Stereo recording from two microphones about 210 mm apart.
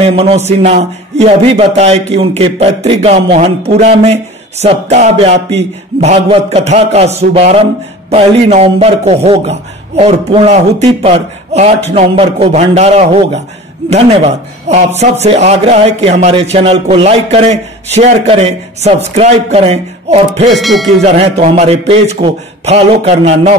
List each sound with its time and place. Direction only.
0.0 s a man's voice: 30° right (ahead or behind)
20.5 s speech: centre (ahead or behind)
21.0 s a man's voice: 30° right (ahead or behind)